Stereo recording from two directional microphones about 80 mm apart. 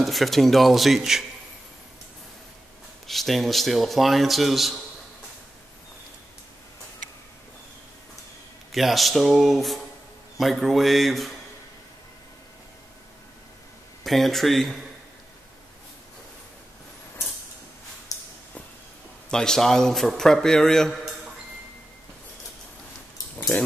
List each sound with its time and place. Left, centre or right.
0.0 s a man's voice: centre
3.1 s a man's voice: centre
8.7 s a man's voice: centre
14.0 s a man's voice: centre
18.1 s a sound: left
19.3 s a man's voice: centre